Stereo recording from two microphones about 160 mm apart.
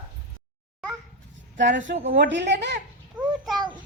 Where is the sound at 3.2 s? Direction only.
Centre (ahead or behind).